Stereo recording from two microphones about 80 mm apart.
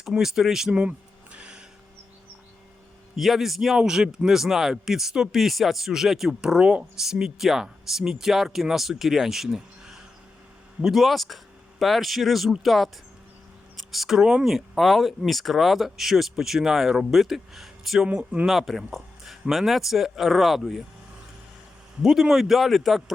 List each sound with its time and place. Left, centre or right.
0.0 s a man's voice: centre
0.7 s a sound: centre
3.2 s a man's voice: centre
18.1 s speech: centre
18.4 s a man's voice: centre
22.0 s a man's voice: centre